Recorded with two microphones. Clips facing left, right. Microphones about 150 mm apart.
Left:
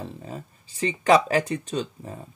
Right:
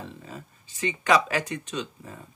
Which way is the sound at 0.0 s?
35° left (ahead or behind).